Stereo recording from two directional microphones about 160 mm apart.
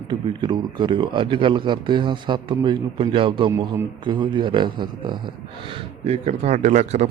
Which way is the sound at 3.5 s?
15° right (ahead or behind).